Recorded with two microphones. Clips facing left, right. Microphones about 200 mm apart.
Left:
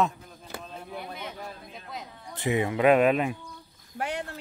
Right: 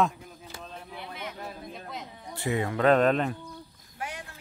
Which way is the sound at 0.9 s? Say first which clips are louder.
Left 5 dB; 45° left (ahead or behind).